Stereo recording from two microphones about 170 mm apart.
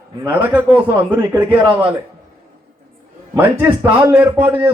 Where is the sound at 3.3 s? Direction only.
10° right (ahead or behind).